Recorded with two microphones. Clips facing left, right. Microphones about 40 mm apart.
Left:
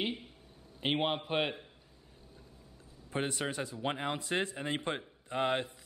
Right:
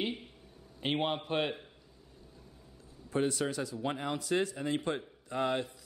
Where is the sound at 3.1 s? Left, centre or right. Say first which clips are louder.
Right 3 dB; left.